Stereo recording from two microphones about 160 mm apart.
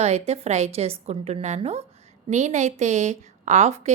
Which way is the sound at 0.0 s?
40° right (ahead or behind).